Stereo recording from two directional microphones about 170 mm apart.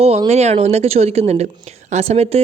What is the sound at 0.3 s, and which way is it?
Speech, 40° right (ahead or behind).